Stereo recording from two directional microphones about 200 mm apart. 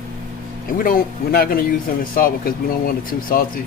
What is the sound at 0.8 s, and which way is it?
Speech, 45° left (ahead or behind).